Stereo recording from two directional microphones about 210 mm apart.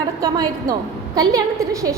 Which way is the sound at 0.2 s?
15° right (ahead or behind).